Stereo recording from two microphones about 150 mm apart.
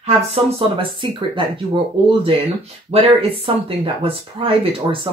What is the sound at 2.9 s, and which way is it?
A woman's voice, 40° right (ahead or behind).